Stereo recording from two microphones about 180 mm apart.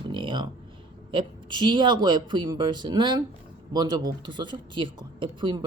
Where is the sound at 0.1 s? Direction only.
25° right (ahead or behind).